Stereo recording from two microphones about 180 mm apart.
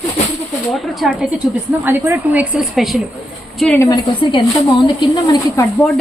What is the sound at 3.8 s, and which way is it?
A woman's voice, 20° left (ahead or behind).